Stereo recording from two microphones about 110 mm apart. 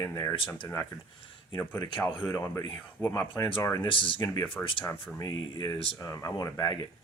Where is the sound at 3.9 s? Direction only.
50° left (ahead or behind).